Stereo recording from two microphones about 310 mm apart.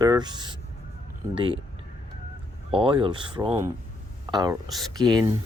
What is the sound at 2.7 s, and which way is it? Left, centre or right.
Speech, centre.